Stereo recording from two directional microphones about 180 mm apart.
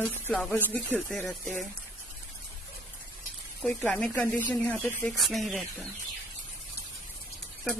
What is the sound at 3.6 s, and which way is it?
Speech, 5° left (ahead or behind).